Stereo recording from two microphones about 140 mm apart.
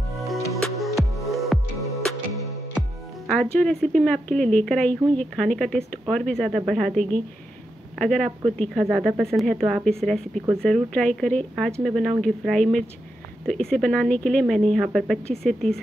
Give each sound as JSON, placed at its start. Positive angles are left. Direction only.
{"t": 0.5, "sound": "music", "side_deg": 0}
{"t": 3.3, "sound": "speech", "side_deg": 10}